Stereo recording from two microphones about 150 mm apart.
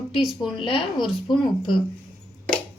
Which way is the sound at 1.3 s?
35° left (ahead or behind).